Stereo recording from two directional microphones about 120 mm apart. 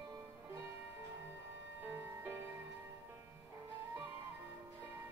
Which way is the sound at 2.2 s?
20° right (ahead or behind).